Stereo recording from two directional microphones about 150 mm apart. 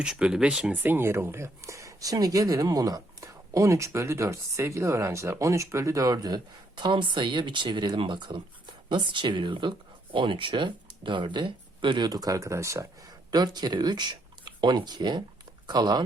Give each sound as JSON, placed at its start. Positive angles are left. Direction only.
{"t": 0.0, "sound": "speech", "side_deg": -5}